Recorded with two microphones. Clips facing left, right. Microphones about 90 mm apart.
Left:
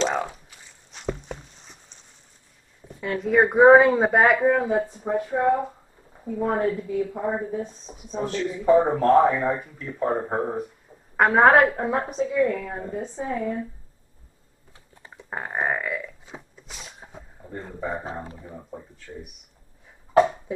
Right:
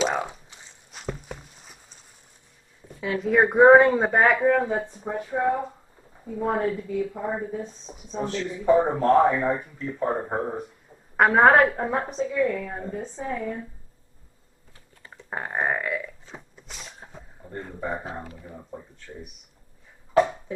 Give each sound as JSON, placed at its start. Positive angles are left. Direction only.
{"t": 0.0, "sound": "a sound", "side_deg": -5}
{"t": 3.0, "sound": "a woman's voice", "side_deg": 0}
{"t": 15.0, "sound": "a sound", "side_deg": 15}
{"t": 15.2, "sound": "burping", "side_deg": 0}
{"t": 18.2, "sound": "speech", "side_deg": 30}
{"t": 18.7, "sound": "a woman's voice", "side_deg": 5}